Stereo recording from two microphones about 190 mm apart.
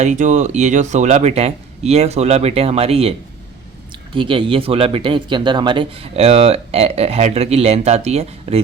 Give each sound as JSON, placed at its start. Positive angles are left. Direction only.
{"t": 0.0, "sound": "speech", "side_deg": -40}